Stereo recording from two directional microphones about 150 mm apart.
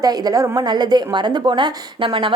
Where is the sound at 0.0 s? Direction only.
25° right (ahead or behind).